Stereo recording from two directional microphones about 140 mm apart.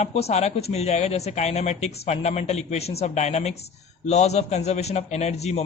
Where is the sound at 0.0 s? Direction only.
50° left (ahead or behind).